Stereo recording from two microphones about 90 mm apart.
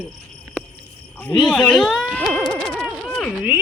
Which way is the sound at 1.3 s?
10° left (ahead or behind).